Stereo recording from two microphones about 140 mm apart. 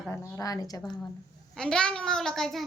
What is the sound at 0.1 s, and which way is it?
Speech, 25° left (ahead or behind).